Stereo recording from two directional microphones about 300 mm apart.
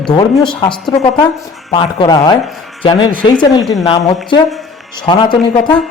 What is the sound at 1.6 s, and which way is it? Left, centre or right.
A man's voice, centre.